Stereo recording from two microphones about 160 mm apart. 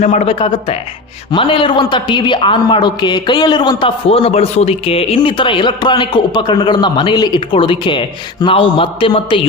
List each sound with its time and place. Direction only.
0.0 s a man's voice: 45° left (ahead or behind)